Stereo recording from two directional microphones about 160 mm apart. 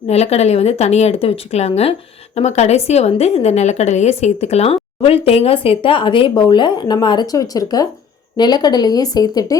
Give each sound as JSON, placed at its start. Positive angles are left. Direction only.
{"t": 0.1, "sound": "speech", "side_deg": 40}